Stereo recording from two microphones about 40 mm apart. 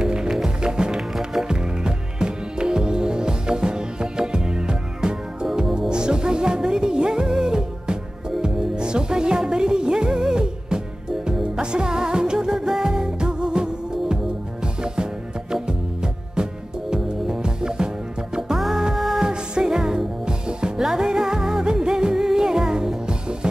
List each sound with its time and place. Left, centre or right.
0.0 s music: centre
18.6 s music: centre
19.2 s music: centre